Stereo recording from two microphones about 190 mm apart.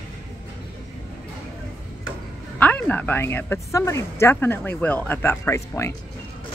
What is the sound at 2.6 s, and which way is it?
Speech, 5° left (ahead or behind).